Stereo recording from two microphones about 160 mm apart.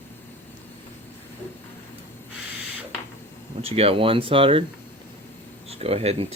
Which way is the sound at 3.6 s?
40° right (ahead or behind).